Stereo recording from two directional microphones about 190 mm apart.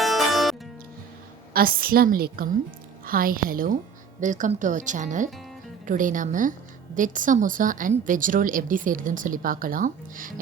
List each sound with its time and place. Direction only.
0.0 s music: centre (ahead or behind)
1.5 s a woman's voice: 50° right (ahead or behind)